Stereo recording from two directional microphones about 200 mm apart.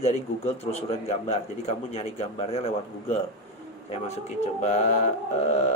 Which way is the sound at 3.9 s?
35° left (ahead or behind).